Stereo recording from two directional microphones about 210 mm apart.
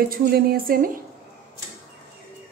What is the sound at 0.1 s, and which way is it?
Speech, 45° right (ahead or behind).